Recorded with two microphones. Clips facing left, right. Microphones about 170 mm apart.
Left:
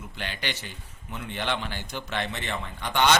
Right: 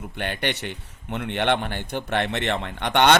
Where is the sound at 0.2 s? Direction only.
60° right (ahead or behind).